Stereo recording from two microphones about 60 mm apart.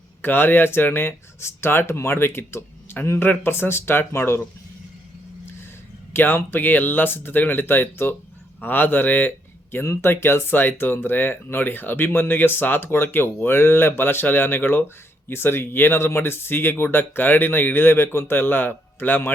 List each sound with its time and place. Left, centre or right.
0.2 s speech: left
6.1 s speech: left
9.8 s speech: left